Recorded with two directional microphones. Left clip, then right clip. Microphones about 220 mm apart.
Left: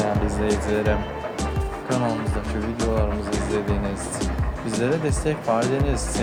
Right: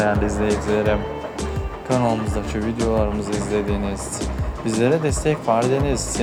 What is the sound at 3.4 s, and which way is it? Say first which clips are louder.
Speech: right 3 dB; 25° right (ahead or behind).